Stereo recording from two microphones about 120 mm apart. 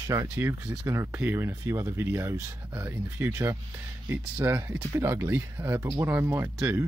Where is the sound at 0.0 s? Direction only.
25° right (ahead or behind).